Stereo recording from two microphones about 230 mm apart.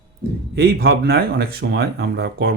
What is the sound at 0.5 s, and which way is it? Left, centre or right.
Speech, right.